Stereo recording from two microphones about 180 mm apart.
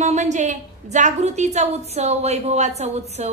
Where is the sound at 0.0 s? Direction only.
40° right (ahead or behind).